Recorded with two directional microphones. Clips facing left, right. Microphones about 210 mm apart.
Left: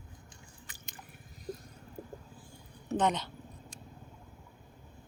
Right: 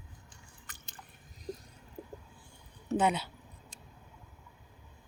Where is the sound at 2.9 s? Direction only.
10° right (ahead or behind).